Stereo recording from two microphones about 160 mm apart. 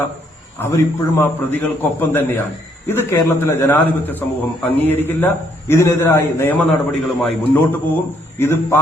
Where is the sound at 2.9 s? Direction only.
15° left (ahead or behind).